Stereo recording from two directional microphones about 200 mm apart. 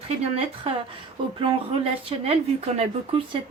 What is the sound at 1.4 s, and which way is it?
Speech, 25° right (ahead or behind).